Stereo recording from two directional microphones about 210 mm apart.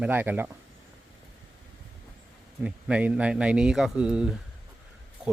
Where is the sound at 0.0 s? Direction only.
10° right (ahead or behind).